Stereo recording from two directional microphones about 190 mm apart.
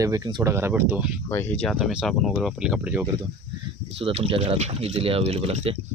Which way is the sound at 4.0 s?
30° right (ahead or behind).